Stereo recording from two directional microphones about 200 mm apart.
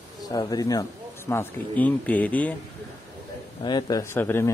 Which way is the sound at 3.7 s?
20° left (ahead or behind).